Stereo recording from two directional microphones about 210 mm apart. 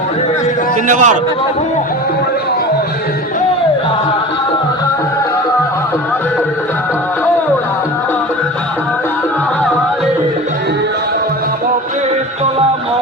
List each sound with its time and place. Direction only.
0.9 s a man's voice: 40° right (ahead or behind)